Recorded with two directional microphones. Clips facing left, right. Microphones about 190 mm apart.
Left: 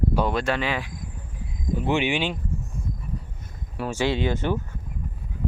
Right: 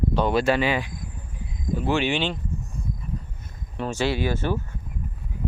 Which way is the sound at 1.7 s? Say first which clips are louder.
Even; 20° left (ahead or behind).